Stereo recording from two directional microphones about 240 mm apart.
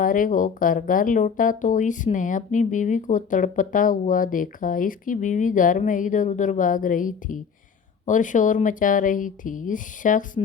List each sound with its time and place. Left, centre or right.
0.0 s speech: left